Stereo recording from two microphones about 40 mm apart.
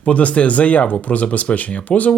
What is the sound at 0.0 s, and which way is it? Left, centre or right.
Speech, left.